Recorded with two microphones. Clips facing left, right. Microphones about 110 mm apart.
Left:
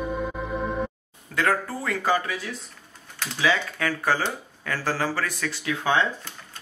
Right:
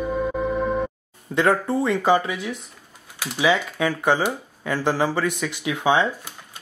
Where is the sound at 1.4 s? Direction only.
25° right (ahead or behind).